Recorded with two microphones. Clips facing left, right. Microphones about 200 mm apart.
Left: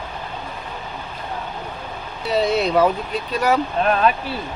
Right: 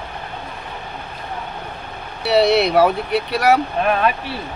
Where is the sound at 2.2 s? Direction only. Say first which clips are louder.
Right 4 dB; 75° right (ahead or behind).